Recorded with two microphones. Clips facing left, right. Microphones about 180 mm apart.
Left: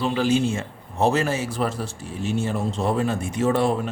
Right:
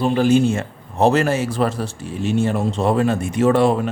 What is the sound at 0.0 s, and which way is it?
A man's voice, 50° right (ahead or behind).